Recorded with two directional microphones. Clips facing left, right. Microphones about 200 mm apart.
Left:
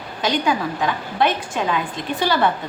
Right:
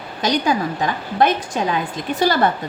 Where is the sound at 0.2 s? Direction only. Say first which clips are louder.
Right 1 dB; 40° right (ahead or behind).